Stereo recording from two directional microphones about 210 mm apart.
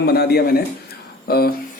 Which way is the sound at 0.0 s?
50° left (ahead or behind).